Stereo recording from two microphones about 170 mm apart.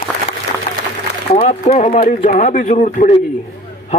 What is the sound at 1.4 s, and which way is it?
A man's voice, 45° left (ahead or behind).